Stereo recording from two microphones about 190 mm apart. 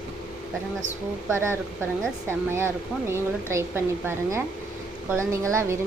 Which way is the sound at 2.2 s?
10° right (ahead or behind).